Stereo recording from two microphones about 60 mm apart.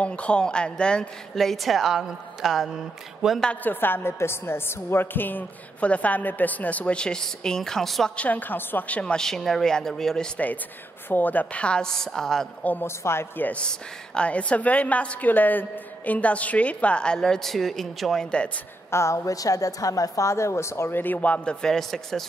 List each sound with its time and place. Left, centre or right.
0.0 s a woman's voice: centre
1.3 s a woman's voice: centre
3.6 s a woman's voice: left; by 8.1 s centre
8.2 s a woman's voice: left; by 10.4 s centre
11.1 s a woman's voice: left; by 12.4 s centre
12.8 s speech: left
13.5 s a woman's voice: centre
18.9 s a woman's voice: left
20.9 s a woman's voice: left
21.5 s a woman's voice: centre